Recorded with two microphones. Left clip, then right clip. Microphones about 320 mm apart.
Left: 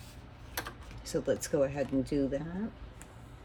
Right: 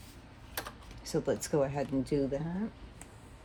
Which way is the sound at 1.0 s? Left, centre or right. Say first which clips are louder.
Left 1 dB; centre.